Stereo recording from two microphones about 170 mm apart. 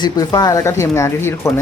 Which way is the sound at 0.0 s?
20° left (ahead or behind).